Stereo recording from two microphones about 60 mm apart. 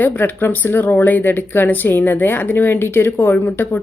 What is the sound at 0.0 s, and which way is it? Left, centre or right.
Speech, left.